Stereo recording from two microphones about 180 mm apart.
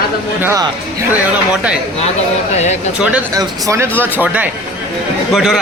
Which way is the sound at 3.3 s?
20° right (ahead or behind).